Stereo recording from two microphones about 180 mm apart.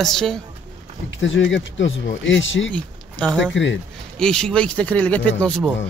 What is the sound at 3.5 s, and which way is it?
Speech, 90° left.